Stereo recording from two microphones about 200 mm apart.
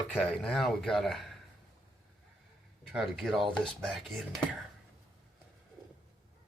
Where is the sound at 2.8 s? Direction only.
Centre (ahead or behind).